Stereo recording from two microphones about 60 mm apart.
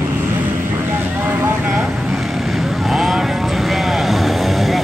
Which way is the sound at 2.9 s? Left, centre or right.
Centre.